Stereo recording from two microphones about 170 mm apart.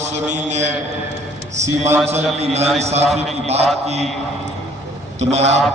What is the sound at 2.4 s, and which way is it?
A man's voice, 40° right (ahead or behind).